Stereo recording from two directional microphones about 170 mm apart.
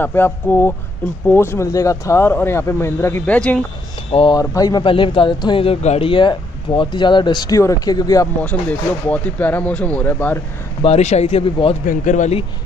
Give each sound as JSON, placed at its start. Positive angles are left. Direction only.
{"t": 0.0, "sound": "speech", "side_deg": 10}
{"t": 4.1, "sound": "speech", "side_deg": 35}
{"t": 4.4, "sound": "speech", "side_deg": 20}
{"t": 8.4, "sound": "speech", "side_deg": 10}
{"t": 10.8, "sound": "speech", "side_deg": 40}
{"t": 11.8, "sound": "speech", "side_deg": 50}